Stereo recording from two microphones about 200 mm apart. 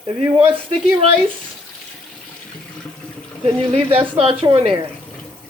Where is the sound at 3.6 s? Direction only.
25° right (ahead or behind).